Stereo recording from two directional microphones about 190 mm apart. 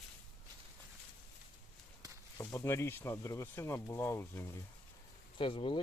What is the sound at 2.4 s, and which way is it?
Speech, 15° left (ahead or behind).